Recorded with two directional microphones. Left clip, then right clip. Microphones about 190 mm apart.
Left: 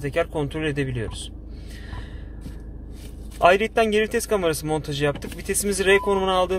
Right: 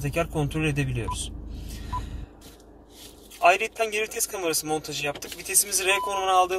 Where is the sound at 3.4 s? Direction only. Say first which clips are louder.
Left 4 dB; 40° left (ahead or behind).